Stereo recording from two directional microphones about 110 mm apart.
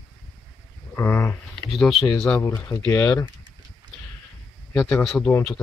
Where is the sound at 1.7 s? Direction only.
5° left (ahead or behind).